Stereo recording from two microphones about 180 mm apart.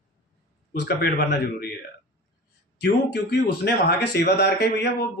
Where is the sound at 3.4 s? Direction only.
65° left (ahead or behind).